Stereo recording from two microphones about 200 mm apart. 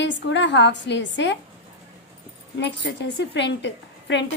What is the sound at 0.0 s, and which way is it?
A woman's voice, 60° left (ahead or behind).